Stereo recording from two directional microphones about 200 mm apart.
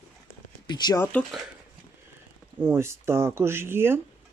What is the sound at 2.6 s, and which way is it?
Speech, 10° right (ahead or behind).